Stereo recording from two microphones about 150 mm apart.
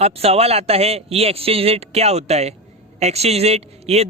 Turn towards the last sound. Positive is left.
turn(degrees=-45)  # may be behind; listen again after turning